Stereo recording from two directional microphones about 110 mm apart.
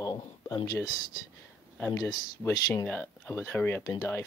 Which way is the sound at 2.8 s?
15° left (ahead or behind).